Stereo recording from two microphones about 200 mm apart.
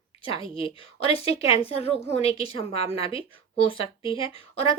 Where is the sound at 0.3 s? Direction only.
25° left (ahead or behind).